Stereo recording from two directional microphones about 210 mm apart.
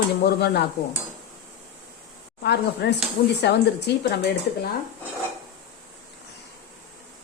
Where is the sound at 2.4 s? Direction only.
50° left (ahead or behind).